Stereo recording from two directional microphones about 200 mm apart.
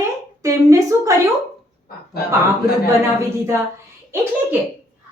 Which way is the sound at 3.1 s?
15° right (ahead or behind).